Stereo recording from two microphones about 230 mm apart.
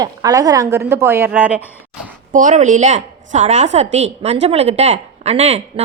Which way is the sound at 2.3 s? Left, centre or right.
Right.